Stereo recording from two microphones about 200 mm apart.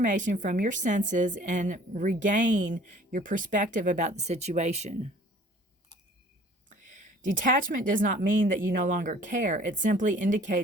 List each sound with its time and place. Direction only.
0.0 s a woman's voice: 40° right (ahead or behind)
7.3 s a woman's voice: 40° right (ahead or behind)